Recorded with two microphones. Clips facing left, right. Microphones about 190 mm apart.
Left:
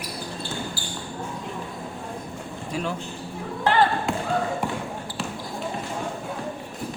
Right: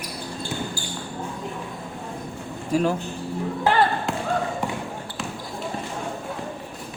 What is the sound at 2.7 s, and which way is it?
Speech, 45° right (ahead or behind).